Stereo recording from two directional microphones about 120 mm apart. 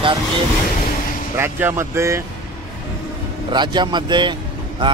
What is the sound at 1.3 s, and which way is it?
Speech, 20° right (ahead or behind).